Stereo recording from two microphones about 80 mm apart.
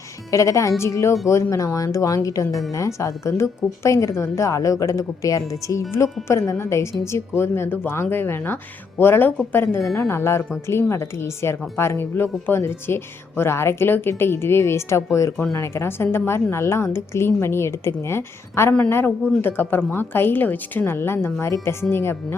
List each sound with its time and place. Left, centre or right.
0.3 s a woman's voice: left